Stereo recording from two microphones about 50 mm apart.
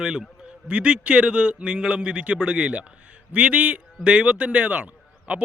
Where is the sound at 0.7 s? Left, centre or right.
Right.